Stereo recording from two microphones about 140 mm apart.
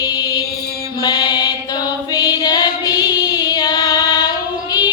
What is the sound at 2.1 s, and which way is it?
Music, 30° left (ahead or behind).